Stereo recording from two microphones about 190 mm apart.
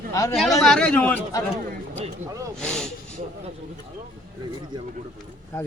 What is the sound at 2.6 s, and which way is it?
Speech, 5° left (ahead or behind).